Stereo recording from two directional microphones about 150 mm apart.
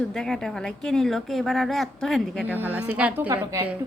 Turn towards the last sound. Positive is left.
turn(degrees=-20)  # may be behind; listen again after turning